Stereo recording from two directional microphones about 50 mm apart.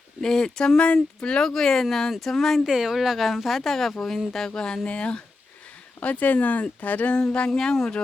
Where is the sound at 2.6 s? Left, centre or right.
Centre.